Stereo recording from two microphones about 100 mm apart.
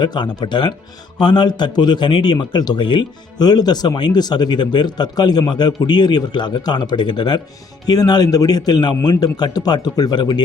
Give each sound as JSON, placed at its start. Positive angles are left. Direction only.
{"t": 0.0, "sound": "speech", "side_deg": 45}